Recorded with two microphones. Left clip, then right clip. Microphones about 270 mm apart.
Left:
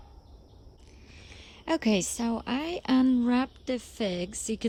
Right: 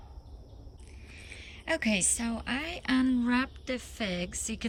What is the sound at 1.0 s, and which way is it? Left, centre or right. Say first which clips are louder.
A woman's voice: right 3 dB; centre.